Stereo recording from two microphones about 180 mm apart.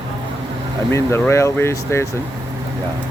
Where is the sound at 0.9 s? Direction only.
15° left (ahead or behind).